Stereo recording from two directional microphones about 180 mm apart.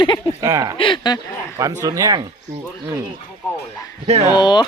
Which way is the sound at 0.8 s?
25° left (ahead or behind).